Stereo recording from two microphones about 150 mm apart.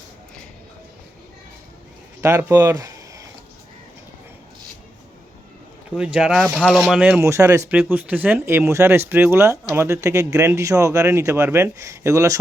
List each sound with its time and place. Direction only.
2.2 s speech: 20° right (ahead or behind)
6.0 s speech: 5° right (ahead or behind)
7.2 s speech: 20° right (ahead or behind)